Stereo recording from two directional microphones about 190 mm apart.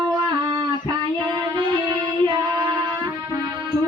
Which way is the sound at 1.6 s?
20° right (ahead or behind).